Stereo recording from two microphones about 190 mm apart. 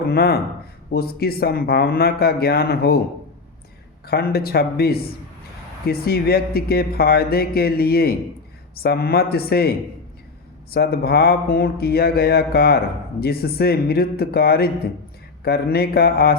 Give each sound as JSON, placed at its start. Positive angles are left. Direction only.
{"t": 0.0, "sound": "speech", "side_deg": 55}
{"t": 4.0, "sound": "speech", "side_deg": 55}